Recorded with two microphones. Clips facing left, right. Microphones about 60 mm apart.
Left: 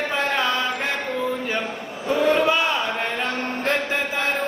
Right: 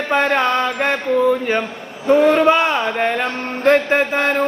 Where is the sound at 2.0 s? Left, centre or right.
Right.